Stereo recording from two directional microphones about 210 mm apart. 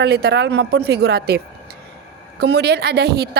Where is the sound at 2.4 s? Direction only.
50° right (ahead or behind).